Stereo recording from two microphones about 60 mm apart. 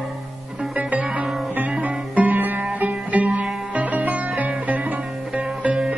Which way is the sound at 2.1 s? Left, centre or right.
Right.